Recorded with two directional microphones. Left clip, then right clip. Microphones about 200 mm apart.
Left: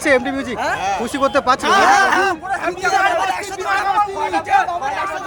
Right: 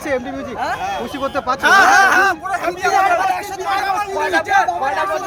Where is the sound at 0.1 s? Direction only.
20° left (ahead or behind).